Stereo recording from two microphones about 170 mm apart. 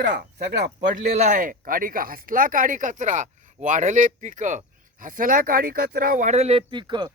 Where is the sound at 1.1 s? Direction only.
45° right (ahead or behind).